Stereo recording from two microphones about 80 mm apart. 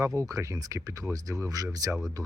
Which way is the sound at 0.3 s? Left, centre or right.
Right.